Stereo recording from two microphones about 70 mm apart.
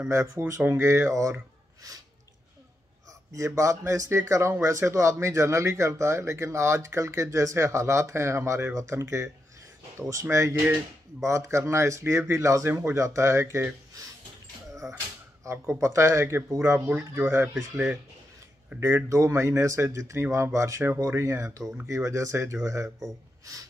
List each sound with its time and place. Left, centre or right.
0.1 s speech: right
3.3 s speech: right
14.8 s speech: right
16.8 s speech: right
17.3 s speech: right
18.8 s speech: right
23.4 s a sound: right